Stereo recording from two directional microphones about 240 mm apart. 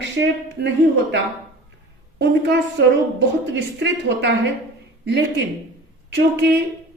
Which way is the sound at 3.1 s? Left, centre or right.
Right.